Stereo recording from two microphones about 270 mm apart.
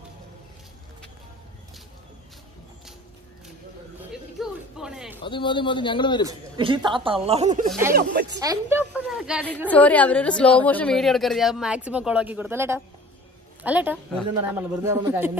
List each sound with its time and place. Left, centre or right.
4.1 s a sound: centre
5.2 s speech: centre
6.2 s speech: centre
7.9 s speech: right
8.4 s a woman's voice: centre
9.7 s a woman's voice: centre